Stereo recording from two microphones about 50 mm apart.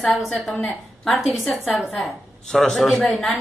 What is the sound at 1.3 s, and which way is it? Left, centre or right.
A man's voice, centre.